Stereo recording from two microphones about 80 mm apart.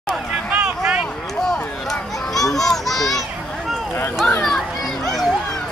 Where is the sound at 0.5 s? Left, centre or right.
Centre.